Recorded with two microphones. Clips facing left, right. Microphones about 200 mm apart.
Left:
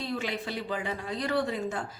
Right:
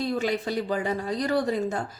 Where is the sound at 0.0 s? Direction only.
40° right (ahead or behind).